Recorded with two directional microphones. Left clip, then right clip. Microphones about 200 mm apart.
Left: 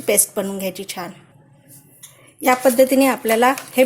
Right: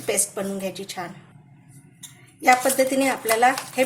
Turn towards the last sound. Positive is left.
turn(degrees=40)  # may be behind; listen again after turning